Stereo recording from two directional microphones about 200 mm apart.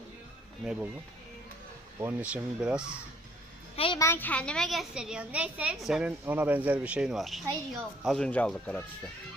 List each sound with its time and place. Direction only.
0.6 s speech: 5° right (ahead or behind)
2.0 s speech: 10° right (ahead or behind)
3.8 s a woman's voice: 25° left (ahead or behind)
4.0 s speech: 10° left (ahead or behind)